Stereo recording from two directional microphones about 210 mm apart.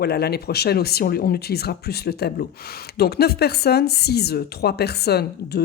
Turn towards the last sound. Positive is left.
turn(degrees=50)  # may be behind; listen again after turning